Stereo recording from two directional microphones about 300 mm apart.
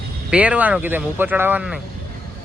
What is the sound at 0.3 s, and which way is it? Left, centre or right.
Speech, centre.